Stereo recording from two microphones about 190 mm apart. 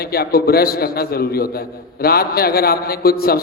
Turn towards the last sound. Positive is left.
turn(degrees=55)  # may be behind; listen again after turning